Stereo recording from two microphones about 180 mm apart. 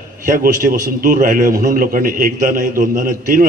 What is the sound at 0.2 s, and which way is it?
A man's voice, 50° right (ahead or behind).